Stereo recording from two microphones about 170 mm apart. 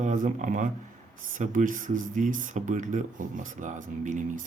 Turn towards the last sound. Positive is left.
turn(degrees=-45)  # may be behind; listen again after turning